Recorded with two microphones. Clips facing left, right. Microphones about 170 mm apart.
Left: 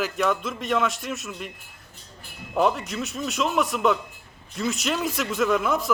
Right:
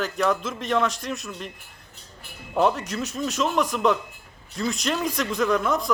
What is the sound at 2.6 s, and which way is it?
Speech, centre (ahead or behind).